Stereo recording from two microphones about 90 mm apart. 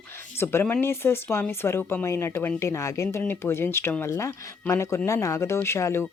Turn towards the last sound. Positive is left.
turn(degrees=30)  # may be behind; listen again after turning